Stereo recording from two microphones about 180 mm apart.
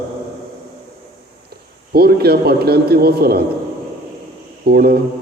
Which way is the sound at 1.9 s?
60° right (ahead or behind).